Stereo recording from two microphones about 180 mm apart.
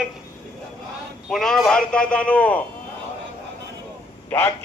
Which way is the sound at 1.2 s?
Centre (ahead or behind).